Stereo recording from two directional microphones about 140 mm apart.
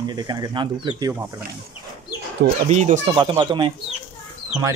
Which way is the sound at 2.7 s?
55° right (ahead or behind).